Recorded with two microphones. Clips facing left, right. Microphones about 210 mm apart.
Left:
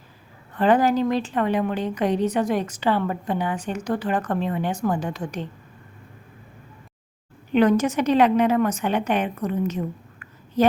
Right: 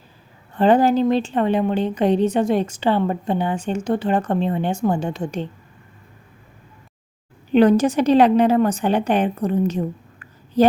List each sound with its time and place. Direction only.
0.5 s a woman's voice: 30° right (ahead or behind)
7.5 s a woman's voice: 30° right (ahead or behind)